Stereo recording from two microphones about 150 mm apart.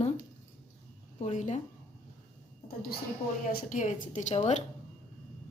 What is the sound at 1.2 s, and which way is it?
Speech, 55° left (ahead or behind).